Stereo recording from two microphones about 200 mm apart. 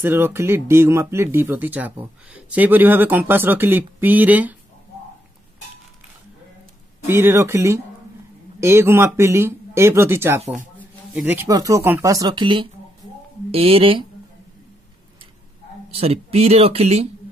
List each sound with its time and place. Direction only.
0.0 s speech: 10° right (ahead or behind)
7.1 s speech: 10° right (ahead or behind); by 14.0 s 25° right (ahead or behind)
15.9 s speech: 30° right (ahead or behind)